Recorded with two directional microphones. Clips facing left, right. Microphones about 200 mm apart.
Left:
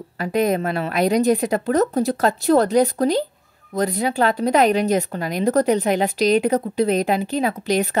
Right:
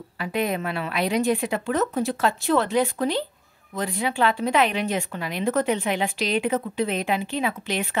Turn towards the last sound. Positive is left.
turn(degrees=40)  # may be behind; listen again after turning